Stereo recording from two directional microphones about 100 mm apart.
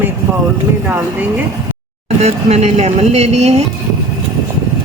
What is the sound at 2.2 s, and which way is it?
Speech, 90° right.